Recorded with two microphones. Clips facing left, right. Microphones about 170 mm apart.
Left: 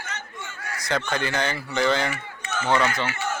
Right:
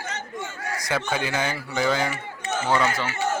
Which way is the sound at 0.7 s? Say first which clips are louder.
Even; 15° right (ahead or behind).